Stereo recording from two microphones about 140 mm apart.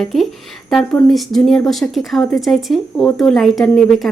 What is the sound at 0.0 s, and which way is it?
A woman's voice, centre (ahead or behind).